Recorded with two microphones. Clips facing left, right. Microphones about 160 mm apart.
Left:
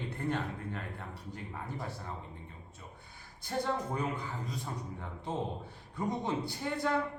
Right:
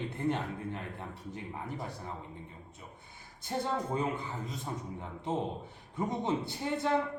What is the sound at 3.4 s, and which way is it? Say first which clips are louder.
Speech: right 1 dB; 20° right (ahead or behind).